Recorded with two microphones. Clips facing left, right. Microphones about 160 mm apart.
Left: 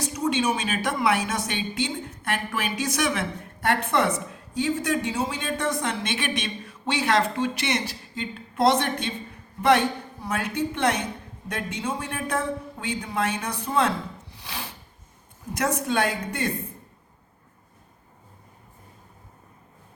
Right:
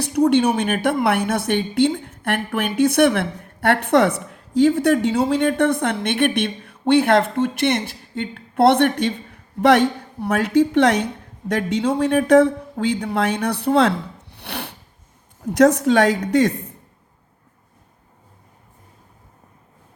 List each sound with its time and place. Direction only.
0.0 s a woman's voice: 65° right (ahead or behind)
15.5 s a woman's voice: 75° right (ahead or behind)